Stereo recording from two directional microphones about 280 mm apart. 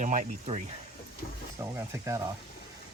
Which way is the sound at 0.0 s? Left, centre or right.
Right.